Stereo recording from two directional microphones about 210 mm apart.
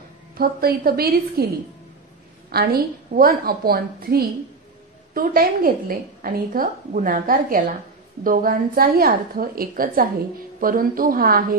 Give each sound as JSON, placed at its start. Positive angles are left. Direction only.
{"t": 0.4, "sound": "a woman's voice", "side_deg": -45}
{"t": 2.5, "sound": "a woman's voice", "side_deg": -45}